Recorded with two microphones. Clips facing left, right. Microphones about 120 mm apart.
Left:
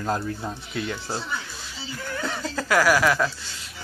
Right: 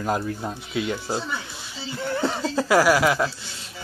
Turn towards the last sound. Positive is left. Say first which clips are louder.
# right 1 dB
turn(degrees=-20)  # may be behind; listen again after turning